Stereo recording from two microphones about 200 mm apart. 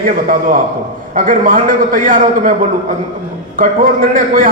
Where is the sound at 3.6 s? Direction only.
45° right (ahead or behind).